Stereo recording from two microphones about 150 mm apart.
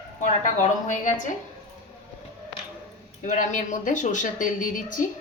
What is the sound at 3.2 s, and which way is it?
A woman's voice, 60° left (ahead or behind).